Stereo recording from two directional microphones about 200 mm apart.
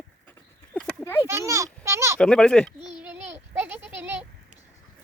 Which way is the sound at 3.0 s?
10° right (ahead or behind).